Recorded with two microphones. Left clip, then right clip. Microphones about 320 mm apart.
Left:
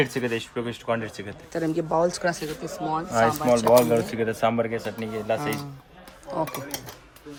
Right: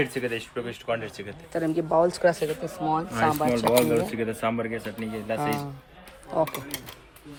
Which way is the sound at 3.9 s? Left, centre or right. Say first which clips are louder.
Left 2 dB; left.